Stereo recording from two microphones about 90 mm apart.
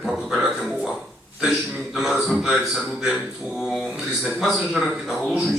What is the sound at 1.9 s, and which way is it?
Speech, 5° right (ahead or behind).